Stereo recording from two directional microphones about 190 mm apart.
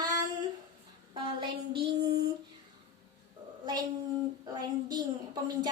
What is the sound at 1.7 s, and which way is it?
Child singing, 55° right (ahead or behind).